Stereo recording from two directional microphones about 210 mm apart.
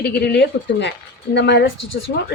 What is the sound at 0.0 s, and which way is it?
A woman's voice, 50° left (ahead or behind).